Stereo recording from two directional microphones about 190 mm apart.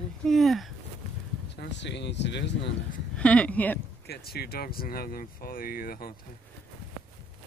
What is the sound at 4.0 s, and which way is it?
Speech, 55° left (ahead or behind).